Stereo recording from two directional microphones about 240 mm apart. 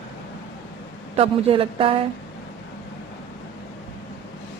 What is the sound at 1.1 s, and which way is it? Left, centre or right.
Speech, right.